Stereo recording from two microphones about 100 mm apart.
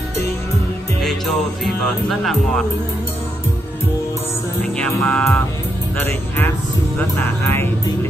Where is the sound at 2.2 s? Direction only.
5° left (ahead or behind).